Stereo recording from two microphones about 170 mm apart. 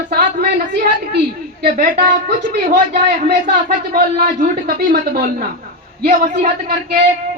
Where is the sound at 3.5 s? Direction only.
65° right (ahead or behind); by 6.4 s 50° right (ahead or behind).